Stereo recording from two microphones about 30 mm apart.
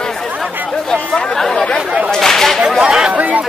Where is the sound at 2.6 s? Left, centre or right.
Centre.